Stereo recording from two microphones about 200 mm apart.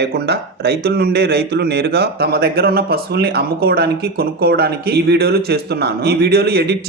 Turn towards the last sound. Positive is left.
turn(degrees=-55)  # may be behind; listen again after turning